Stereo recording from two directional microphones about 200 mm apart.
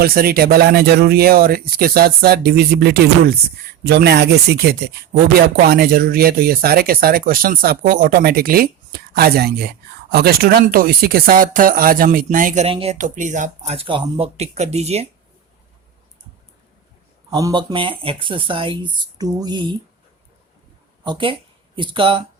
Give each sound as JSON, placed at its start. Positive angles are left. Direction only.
{"t": 0.0, "sound": "speech", "side_deg": -50}
{"t": 12.6, "sound": "speech", "side_deg": -30}
{"t": 17.3, "sound": "speech", "side_deg": -20}
{"t": 21.0, "sound": "speech", "side_deg": -25}